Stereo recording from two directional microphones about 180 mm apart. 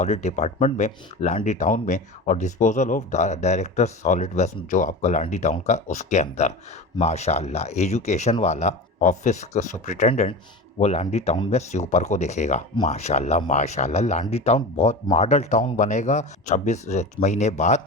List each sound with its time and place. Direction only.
0.0 s speech: 40° left (ahead or behind)